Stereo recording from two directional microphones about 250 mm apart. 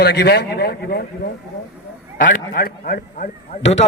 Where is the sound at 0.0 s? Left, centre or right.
Left.